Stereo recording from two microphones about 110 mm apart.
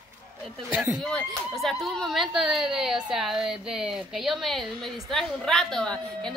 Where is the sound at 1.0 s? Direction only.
5° left (ahead or behind).